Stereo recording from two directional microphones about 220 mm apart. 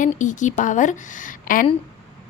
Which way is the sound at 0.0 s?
35° left (ahead or behind).